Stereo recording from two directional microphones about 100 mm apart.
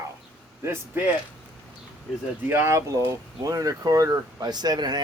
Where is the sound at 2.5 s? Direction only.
25° right (ahead or behind); by 5.0 s 45° right (ahead or behind).